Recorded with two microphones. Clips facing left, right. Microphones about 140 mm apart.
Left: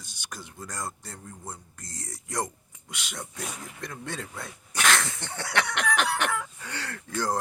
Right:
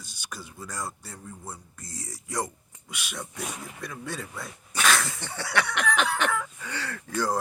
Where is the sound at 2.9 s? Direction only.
15° left (ahead or behind).